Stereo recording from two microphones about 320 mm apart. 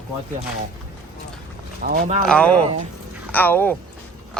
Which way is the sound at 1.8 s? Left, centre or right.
Right.